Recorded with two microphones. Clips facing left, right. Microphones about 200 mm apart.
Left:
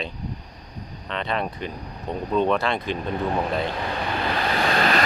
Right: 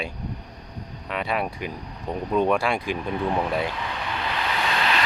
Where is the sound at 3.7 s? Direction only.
40° left (ahead or behind).